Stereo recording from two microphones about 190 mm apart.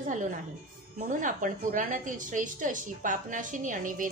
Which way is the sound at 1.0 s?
45° right (ahead or behind).